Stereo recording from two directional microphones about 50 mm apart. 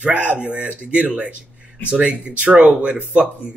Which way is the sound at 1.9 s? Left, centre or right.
Right.